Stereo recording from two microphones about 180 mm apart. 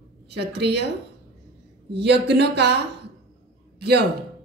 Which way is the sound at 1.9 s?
70° right (ahead or behind).